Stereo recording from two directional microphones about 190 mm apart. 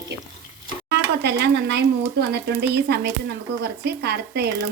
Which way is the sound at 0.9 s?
60° right (ahead or behind).